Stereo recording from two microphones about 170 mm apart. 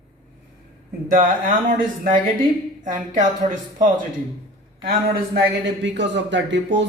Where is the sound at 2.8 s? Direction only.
50° right (ahead or behind).